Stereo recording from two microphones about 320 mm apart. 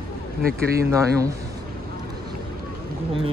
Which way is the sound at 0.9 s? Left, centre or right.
Centre.